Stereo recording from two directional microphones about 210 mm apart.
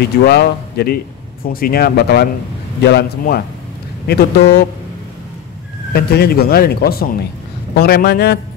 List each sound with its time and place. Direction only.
0.0 s speech: 50° left (ahead or behind)
5.9 s speech: 50° left (ahead or behind)